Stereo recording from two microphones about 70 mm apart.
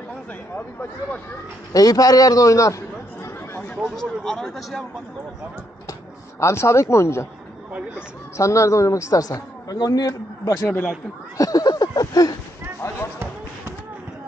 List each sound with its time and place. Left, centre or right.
0.6 s speech: left
1.7 s a man's voice: left
3.7 s speech: centre
6.4 s speech: left
8.4 s a man's voice: left
11.3 s a sound: left
12.8 s basketball bounce: left